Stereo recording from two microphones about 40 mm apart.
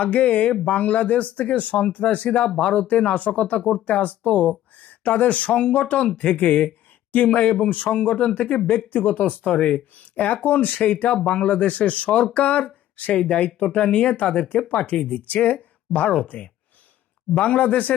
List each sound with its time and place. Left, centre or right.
0.0 s speech: left
2.4 s speech: centre
3.0 s speech: left
9.4 s speech: left
10.3 s speech: left
13.1 s speech: left